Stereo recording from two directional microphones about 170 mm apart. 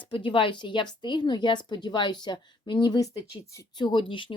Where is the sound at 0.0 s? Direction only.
30° left (ahead or behind).